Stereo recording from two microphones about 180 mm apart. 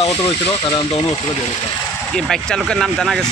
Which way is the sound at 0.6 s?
30° left (ahead or behind).